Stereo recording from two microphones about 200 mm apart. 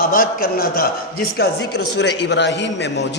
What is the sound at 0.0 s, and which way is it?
A woman's voice, 45° left (ahead or behind).